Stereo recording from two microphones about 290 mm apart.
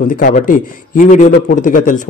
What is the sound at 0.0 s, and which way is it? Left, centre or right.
A man's voice, left.